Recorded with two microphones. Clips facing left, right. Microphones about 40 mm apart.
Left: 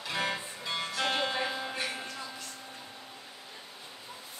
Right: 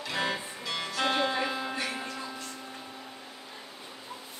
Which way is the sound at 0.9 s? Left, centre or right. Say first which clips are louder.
Right 4 dB; centre.